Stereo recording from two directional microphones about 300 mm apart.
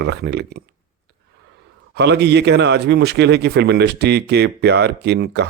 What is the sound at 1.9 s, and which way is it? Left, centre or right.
A man's voice, right.